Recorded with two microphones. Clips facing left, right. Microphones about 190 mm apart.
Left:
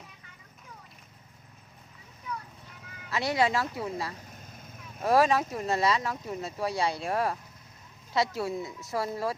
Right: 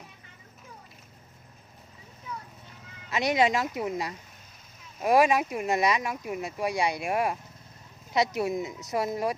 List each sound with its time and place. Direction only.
3.1 s speech: 20° right (ahead or behind)